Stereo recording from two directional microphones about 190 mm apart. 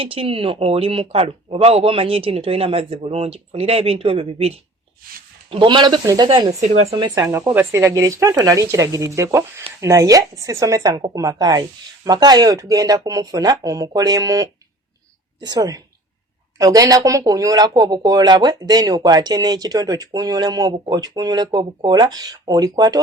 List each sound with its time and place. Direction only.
0.0 s speech: 30° right (ahead or behind)
6.6 s speech: 40° right (ahead or behind)
6.9 s speech: 20° right (ahead or behind)